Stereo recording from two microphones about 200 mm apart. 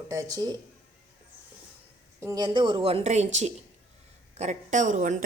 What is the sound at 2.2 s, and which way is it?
A woman's voice, 20° right (ahead or behind).